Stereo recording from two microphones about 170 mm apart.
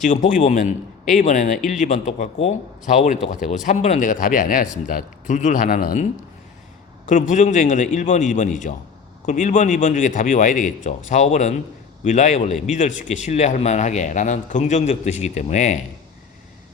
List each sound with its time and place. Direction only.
0.0 s a man's voice: 50° left (ahead or behind)